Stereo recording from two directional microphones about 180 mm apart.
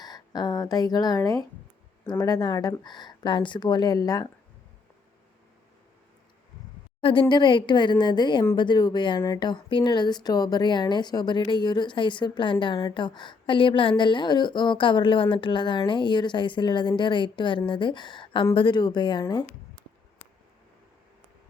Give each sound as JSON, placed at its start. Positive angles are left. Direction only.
{"t": 0.0, "sound": "speech", "side_deg": 25}
{"t": 7.0, "sound": "speech", "side_deg": 30}